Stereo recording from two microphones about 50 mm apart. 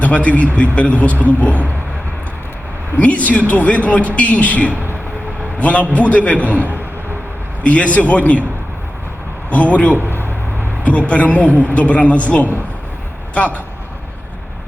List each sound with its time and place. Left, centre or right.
0.3 s a man's voice: left
3.0 s speech: left
5.9 s speech: left
7.6 s speech: left
9.5 s speech: left